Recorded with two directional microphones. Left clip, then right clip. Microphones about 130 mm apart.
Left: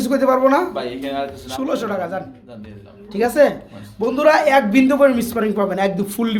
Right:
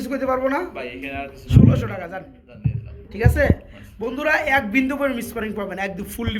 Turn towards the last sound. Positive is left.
turn(degrees=15)  # may be behind; listen again after turning